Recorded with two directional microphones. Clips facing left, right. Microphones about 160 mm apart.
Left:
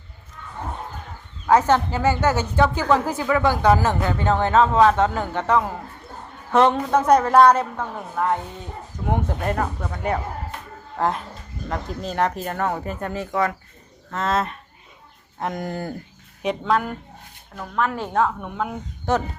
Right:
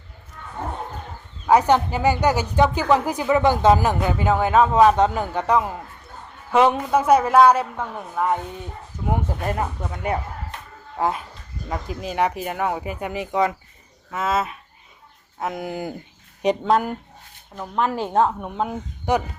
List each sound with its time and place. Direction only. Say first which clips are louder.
1.5 s speech: right 1 dB; 15° right (ahead or behind)
14.1 s speech: even; 5° right (ahead or behind)
16.5 s speech: right 3 dB; 35° right (ahead or behind)
19.1 s speech: right 1 dB; 15° right (ahead or behind)